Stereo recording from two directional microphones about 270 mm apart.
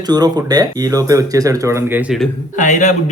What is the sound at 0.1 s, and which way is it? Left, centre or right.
Speech, centre.